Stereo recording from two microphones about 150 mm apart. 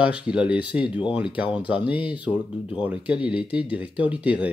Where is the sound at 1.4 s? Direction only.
35° left (ahead or behind).